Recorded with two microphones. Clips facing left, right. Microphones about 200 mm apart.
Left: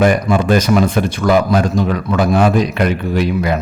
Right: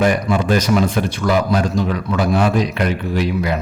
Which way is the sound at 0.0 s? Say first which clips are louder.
Left 3 dB; 50° left (ahead or behind).